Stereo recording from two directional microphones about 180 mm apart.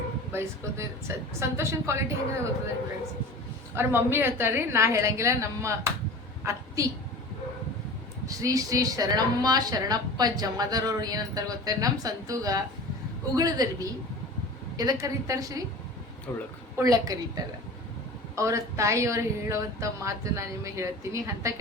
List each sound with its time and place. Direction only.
0.3 s speech: 15° right (ahead or behind)
3.8 s speech: 15° right (ahead or behind)
6.4 s a sound: 15° right (ahead or behind)
8.4 s a woman's voice: 20° right (ahead or behind)
16.3 s speech: 10° left (ahead or behind)
16.7 s a woman's voice: 20° right (ahead or behind)